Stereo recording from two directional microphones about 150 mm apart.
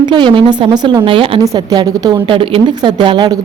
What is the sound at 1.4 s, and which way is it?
A woman's voice, 25° right (ahead or behind).